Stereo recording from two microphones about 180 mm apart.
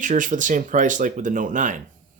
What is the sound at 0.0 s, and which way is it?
Speech, 45° right (ahead or behind).